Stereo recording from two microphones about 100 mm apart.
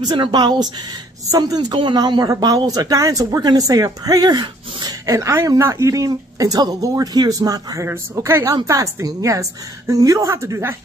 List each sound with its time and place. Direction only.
0.1 s speech: 50° right (ahead or behind); by 10.8 s 25° right (ahead or behind)